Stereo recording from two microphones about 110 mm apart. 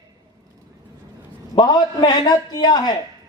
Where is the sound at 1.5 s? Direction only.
40° left (ahead or behind).